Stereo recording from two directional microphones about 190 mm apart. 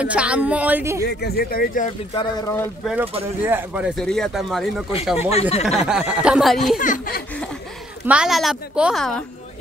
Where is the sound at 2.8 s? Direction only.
5° right (ahead or behind).